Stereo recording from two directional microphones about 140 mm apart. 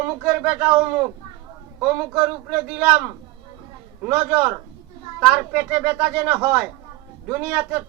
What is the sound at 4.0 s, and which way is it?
Speech, 15° right (ahead or behind).